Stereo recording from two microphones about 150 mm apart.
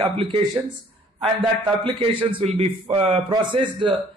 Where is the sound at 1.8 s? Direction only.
35° right (ahead or behind).